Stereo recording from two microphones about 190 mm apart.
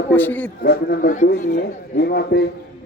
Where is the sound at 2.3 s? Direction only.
60° left (ahead or behind).